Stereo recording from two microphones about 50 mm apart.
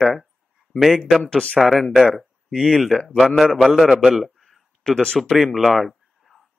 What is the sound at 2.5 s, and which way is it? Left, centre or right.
Speech, centre.